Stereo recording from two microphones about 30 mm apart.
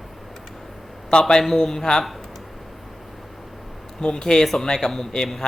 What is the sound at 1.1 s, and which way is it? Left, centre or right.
Speech, left.